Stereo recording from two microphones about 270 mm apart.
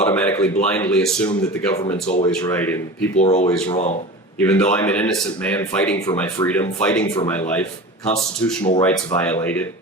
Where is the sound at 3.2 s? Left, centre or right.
Left.